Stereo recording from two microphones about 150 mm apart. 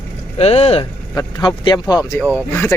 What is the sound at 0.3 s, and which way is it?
Speech, 45° left (ahead or behind).